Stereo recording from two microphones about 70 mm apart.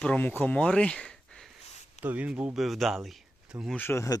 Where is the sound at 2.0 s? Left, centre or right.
Right.